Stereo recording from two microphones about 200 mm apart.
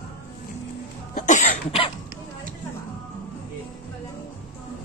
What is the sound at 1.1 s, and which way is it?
Cough, 40° left (ahead or behind).